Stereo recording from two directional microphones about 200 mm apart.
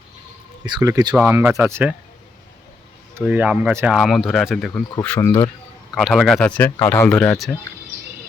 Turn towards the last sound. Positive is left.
turn(degrees=5)  # may be behind; listen again after turning